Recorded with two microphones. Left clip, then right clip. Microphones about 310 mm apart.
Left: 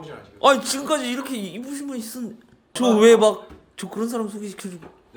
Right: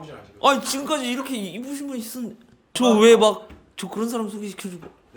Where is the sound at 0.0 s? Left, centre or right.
Centre.